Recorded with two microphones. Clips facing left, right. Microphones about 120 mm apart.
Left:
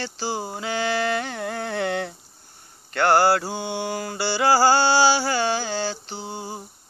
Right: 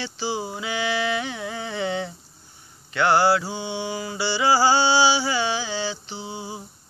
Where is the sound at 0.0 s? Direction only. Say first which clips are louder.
Even; 40° left (ahead or behind); by 2.1 s 60° left (ahead or behind).